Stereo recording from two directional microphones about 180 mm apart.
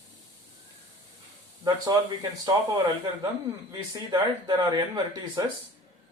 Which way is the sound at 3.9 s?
20° right (ahead or behind).